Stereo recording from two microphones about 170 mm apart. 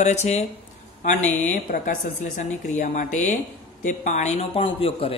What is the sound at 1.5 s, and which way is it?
A woman's voice, 50° left (ahead or behind).